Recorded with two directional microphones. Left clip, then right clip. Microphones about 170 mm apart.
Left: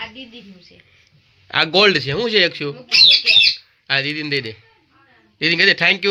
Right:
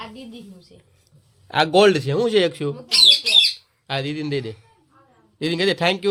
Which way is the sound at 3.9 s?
10° right (ahead or behind).